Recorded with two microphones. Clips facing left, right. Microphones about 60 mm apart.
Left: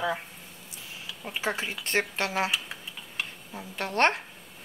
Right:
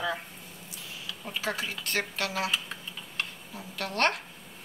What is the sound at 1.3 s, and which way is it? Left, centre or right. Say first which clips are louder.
A woman's voice: left 2 dB; left.